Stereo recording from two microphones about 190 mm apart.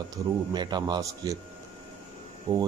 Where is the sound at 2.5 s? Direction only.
20° right (ahead or behind).